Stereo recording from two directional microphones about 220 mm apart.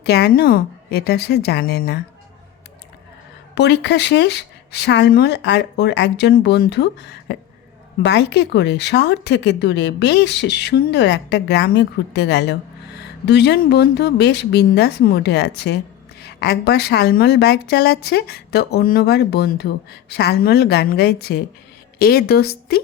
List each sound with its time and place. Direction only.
0.0 s a woman's voice: 50° left (ahead or behind)
3.5 s a woman's voice: 50° left (ahead or behind)